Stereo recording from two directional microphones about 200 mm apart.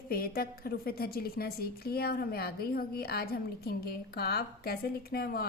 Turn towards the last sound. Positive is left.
turn(degrees=50)  # may be behind; listen again after turning